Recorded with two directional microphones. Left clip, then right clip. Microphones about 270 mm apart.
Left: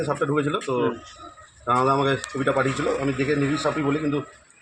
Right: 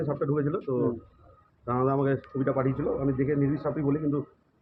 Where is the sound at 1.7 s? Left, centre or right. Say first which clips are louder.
Left 6 dB; centre.